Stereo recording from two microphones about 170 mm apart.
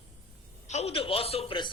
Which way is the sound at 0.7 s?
35° left (ahead or behind).